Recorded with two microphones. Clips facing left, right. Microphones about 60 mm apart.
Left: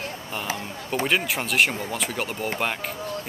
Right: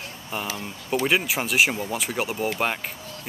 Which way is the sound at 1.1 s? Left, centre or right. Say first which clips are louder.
Even; centre.